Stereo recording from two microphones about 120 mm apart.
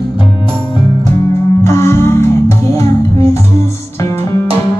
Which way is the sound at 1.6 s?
20° left (ahead or behind).